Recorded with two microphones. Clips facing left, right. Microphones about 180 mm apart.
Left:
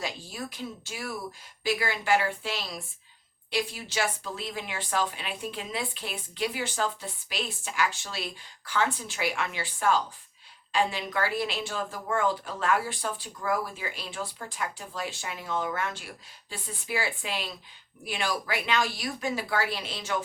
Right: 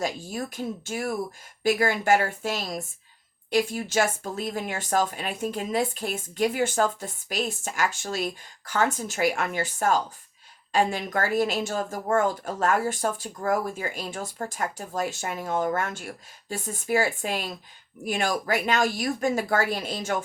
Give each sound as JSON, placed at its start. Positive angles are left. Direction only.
{"t": 0.0, "sound": "speech", "side_deg": -45}